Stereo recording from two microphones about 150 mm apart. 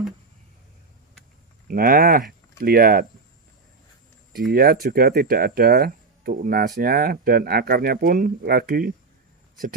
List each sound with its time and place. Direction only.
1.7 s speech: 75° right (ahead or behind)
4.3 s speech: 85° right